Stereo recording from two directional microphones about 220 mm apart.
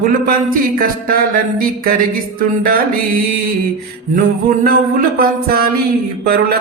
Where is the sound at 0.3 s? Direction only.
40° right (ahead or behind).